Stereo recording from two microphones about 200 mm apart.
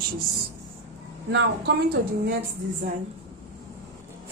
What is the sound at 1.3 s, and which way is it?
Speech, 65° right (ahead or behind).